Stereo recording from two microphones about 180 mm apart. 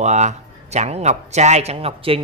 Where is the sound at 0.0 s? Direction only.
40° right (ahead or behind).